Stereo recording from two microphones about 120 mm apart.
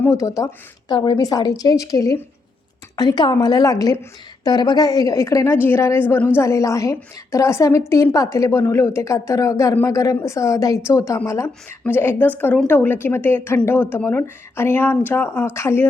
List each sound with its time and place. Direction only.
0.0 s a woman's voice: 25° left (ahead or behind)